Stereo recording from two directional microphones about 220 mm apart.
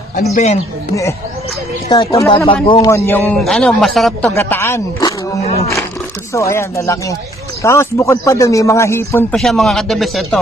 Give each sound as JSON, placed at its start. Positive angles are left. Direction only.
{"t": 0.1, "sound": "speech", "side_deg": 35}
{"t": 1.9, "sound": "a man's voice", "side_deg": 15}
{"t": 2.9, "sound": "a man's voice", "side_deg": 10}
{"t": 4.3, "sound": "a man's voice", "side_deg": 10}
{"t": 5.4, "sound": "speech", "side_deg": 30}
{"t": 6.3, "sound": "a man's voice", "side_deg": 15}
{"t": 9.4, "sound": "a man's voice", "side_deg": 0}